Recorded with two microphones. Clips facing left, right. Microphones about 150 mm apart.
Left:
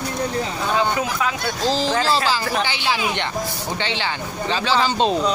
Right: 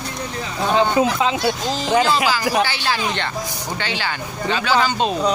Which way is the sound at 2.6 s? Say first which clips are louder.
Right 1 dB; 15° left (ahead or behind).